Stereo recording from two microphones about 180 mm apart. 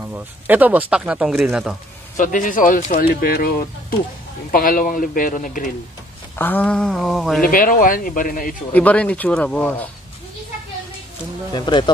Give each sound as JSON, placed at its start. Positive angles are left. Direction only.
{"t": 0.1, "sound": "speech", "side_deg": -10}
{"t": 2.1, "sound": "speech", "side_deg": 45}
{"t": 6.3, "sound": "speech", "side_deg": 10}
{"t": 7.4, "sound": "speech", "side_deg": 50}
{"t": 8.7, "sound": "speech", "side_deg": 10}
{"t": 11.5, "sound": "speech", "side_deg": 25}